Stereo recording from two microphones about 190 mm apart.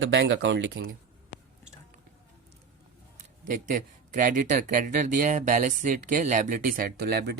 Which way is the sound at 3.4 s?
45° right (ahead or behind).